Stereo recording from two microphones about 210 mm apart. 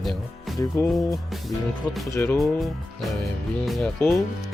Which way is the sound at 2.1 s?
10° left (ahead or behind).